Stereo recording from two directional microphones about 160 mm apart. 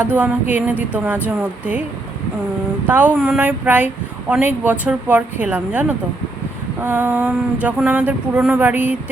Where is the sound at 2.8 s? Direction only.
10° right (ahead or behind).